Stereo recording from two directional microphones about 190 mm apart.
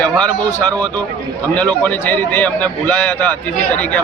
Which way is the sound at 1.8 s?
10° left (ahead or behind).